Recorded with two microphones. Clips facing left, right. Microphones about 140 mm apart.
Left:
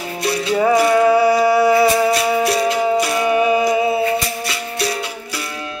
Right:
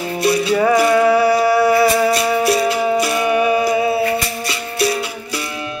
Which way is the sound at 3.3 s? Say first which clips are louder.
Left 1 dB; 20° left (ahead or behind).